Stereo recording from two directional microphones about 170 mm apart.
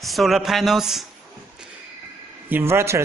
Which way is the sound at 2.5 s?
15° right (ahead or behind).